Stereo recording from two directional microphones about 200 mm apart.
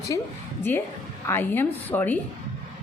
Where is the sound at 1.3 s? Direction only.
10° left (ahead or behind).